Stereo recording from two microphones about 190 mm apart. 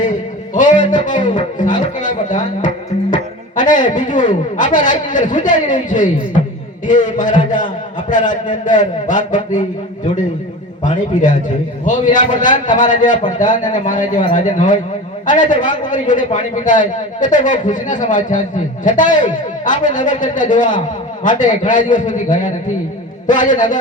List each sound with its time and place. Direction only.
0.5 s a sound: 45° left (ahead or behind)
1.2 s speech: 25° left (ahead or behind)
2.0 s a man's voice: 45° left (ahead or behind)
3.5 s a sound: 45° left (ahead or behind)
3.9 s a man's voice: 45° left (ahead or behind)
10.8 s a man's voice: 45° left (ahead or behind)